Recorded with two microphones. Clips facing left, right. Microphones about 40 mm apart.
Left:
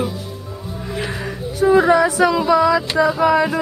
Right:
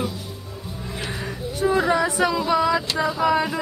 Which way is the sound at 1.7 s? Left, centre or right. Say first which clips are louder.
Left 7 dB; centre.